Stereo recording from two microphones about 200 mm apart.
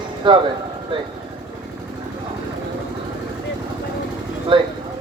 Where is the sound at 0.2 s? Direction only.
25° right (ahead or behind).